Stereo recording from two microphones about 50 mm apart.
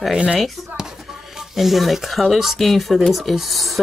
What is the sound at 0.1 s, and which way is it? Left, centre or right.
Speech, centre.